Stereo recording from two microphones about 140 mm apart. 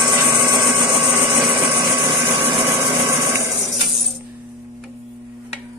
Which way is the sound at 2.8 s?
20° right (ahead or behind).